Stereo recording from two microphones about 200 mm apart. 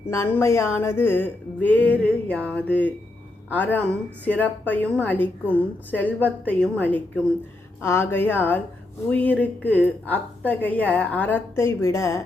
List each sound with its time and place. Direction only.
0.1 s a woman's voice: 15° left (ahead or behind)